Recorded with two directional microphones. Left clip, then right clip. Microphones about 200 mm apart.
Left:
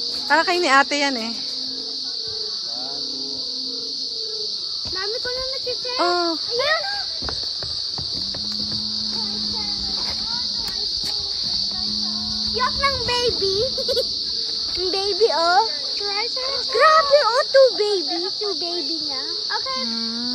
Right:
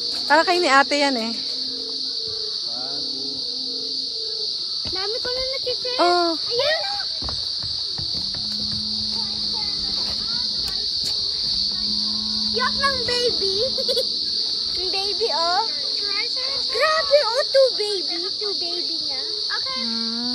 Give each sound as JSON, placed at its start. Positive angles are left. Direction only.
{"t": 0.3, "sound": "speech", "side_deg": 5}
{"t": 5.9, "sound": "speech", "side_deg": 5}
{"t": 12.5, "sound": "speech", "side_deg": 25}
{"t": 15.0, "sound": "speech", "side_deg": 35}
{"t": 16.7, "sound": "speech", "side_deg": 30}